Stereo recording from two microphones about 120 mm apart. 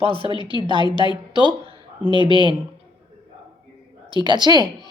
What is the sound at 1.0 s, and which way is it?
Speech, 35° right (ahead or behind).